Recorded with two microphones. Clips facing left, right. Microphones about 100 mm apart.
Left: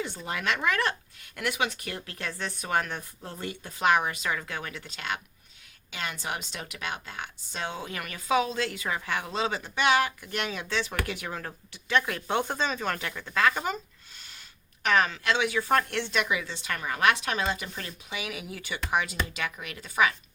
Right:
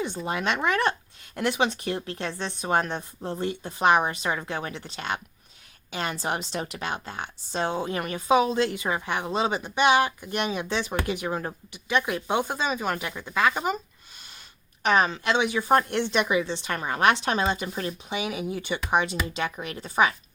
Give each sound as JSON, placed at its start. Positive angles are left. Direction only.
{"t": 0.3, "sound": "speech", "side_deg": -25}
{"t": 14.8, "sound": "speech", "side_deg": -25}